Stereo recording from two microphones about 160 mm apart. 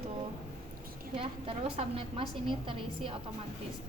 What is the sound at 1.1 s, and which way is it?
A woman's voice, 35° right (ahead or behind).